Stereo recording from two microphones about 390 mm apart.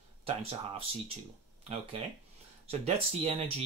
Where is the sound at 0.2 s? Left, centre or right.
Centre.